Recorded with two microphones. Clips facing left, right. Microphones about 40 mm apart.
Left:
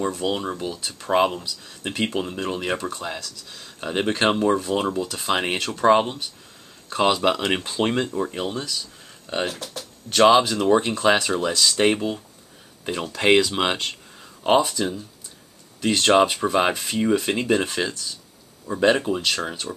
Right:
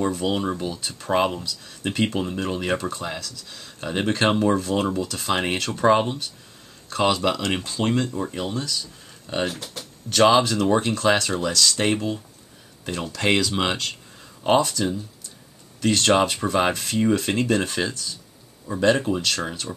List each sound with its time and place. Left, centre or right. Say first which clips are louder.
0.0 s speech: right 1 dB; centre